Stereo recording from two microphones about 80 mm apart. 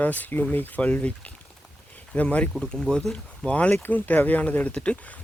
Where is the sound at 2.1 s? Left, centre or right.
Centre.